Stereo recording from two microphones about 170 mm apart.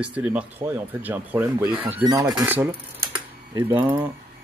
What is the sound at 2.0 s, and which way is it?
Speech, 20° right (ahead or behind).